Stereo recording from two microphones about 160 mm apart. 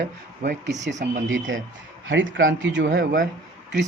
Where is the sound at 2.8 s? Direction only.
75° right (ahead or behind).